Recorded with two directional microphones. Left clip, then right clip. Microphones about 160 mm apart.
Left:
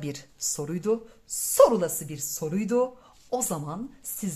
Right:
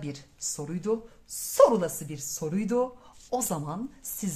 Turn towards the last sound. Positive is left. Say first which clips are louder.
# even
turn(degrees=5)  # may be behind; listen again after turning